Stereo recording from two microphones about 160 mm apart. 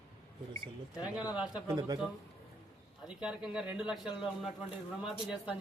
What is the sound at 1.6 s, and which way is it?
Speech, 25° right (ahead or behind).